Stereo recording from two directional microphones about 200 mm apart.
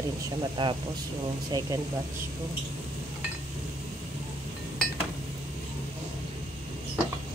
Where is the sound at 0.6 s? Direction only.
25° right (ahead or behind).